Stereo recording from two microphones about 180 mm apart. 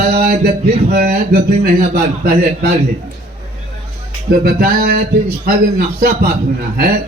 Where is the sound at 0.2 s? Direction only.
55° right (ahead or behind).